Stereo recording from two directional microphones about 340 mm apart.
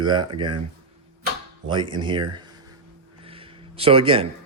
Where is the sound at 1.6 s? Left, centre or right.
Centre.